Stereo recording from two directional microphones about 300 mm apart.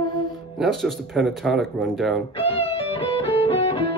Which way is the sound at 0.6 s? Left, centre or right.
Centre.